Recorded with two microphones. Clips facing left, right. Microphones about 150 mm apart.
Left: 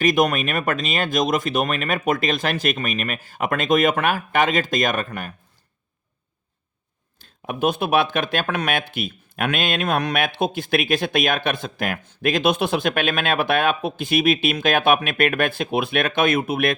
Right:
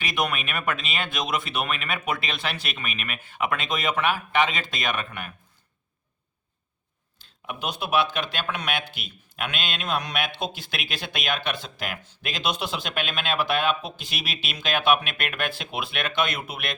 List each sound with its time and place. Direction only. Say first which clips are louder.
0.0 s speech: left 9 dB; 45° left (ahead or behind)
7.2 s speech: left 10 dB; 50° left (ahead or behind)